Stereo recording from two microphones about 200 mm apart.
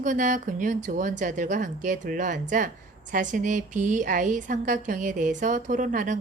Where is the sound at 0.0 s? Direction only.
40° right (ahead or behind).